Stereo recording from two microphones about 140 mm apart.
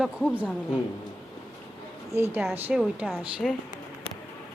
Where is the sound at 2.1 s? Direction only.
20° right (ahead or behind); by 3.6 s centre (ahead or behind).